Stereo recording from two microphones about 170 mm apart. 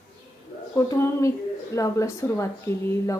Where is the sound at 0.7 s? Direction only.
20° left (ahead or behind).